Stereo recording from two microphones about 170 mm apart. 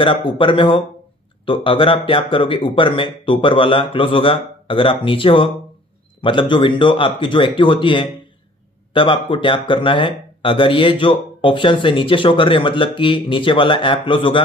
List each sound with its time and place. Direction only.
0.0 s speech: 30° left (ahead or behind)